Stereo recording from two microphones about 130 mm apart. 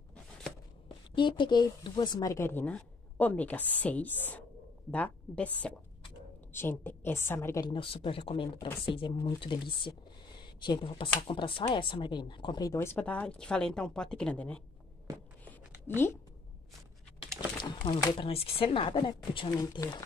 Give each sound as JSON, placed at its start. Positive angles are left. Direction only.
{"t": 1.1, "sound": "speech", "side_deg": 35}
{"t": 6.5, "sound": "speech", "side_deg": 15}
{"t": 7.6, "sound": "speech", "side_deg": 40}
{"t": 12.9, "sound": "speech", "side_deg": 10}
{"t": 17.6, "sound": "speech", "side_deg": 35}